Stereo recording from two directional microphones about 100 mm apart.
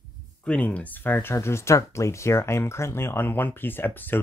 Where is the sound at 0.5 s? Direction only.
15° left (ahead or behind).